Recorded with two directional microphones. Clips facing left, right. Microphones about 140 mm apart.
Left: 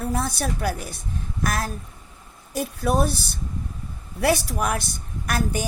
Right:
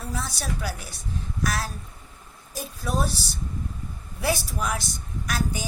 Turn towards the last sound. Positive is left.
turn(degrees=60)  # may be behind; listen again after turning